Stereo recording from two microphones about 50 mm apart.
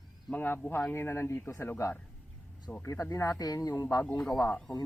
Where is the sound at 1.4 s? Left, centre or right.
Left.